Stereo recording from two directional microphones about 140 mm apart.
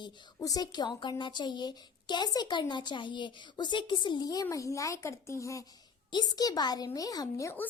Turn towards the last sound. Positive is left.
turn(degrees=20)  # may be behind; listen again after turning